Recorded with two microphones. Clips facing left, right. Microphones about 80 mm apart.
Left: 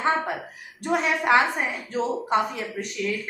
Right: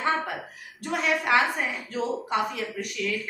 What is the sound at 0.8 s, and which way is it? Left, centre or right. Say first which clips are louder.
A woman's voice: left 3 dB; left.